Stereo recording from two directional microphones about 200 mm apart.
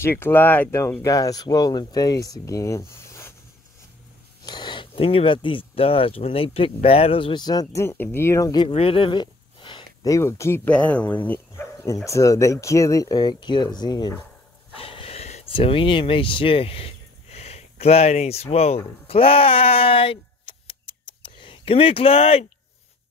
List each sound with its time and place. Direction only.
0.0 s speech: 10° left (ahead or behind)
4.5 s speech: 20° left (ahead or behind)
14.8 s a sound: 30° left (ahead or behind)